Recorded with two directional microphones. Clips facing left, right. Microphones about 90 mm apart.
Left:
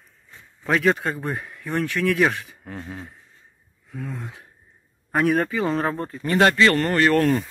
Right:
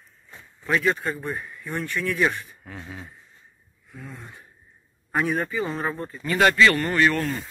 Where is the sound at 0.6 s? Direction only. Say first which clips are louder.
Left 3 dB; 85° left.